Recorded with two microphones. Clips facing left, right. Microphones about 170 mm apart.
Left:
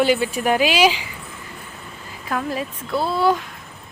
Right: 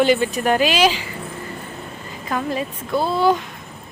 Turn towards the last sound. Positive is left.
turn(degrees=0)  # may be behind; listen again after turning